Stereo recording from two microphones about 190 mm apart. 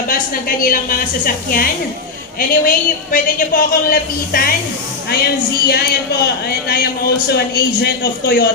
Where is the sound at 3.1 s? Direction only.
50° left (ahead or behind).